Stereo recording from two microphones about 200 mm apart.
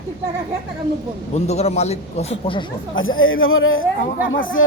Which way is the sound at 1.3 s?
35° left (ahead or behind).